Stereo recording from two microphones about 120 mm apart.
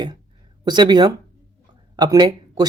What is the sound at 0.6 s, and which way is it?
Speech, 35° right (ahead or behind).